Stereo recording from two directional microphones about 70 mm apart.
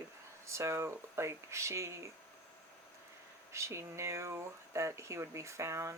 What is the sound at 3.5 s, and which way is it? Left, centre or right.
Speech, right.